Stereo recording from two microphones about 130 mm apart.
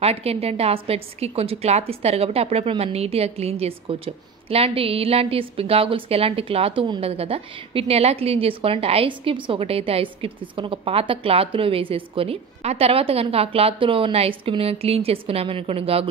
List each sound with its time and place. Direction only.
0.0 s a woman's voice: 50° right (ahead or behind)